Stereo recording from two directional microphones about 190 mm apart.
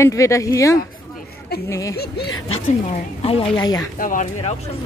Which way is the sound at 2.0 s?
60° left (ahead or behind).